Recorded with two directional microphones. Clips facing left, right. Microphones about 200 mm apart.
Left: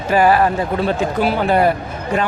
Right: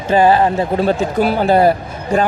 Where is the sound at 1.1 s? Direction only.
40° right (ahead or behind).